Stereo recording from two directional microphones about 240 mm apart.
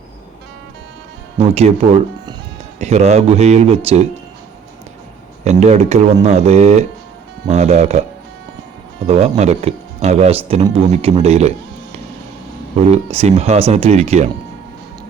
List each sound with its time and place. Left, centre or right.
1.4 s speech: right
2.8 s speech: right
5.5 s speech: right
9.0 s speech: right